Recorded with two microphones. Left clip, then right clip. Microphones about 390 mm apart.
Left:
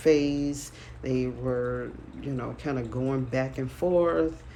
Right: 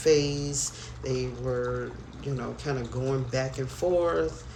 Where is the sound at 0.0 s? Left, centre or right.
Centre.